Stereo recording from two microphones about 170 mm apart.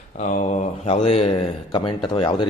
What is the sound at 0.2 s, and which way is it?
Speech, 50° left (ahead or behind).